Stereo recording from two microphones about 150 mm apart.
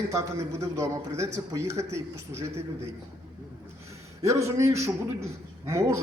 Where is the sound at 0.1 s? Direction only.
20° right (ahead or behind).